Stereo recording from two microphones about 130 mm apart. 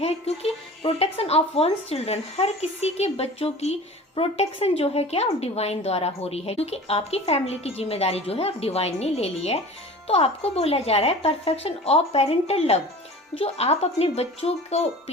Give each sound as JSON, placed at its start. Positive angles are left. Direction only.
{"t": 0.0, "sound": "speech", "side_deg": 50}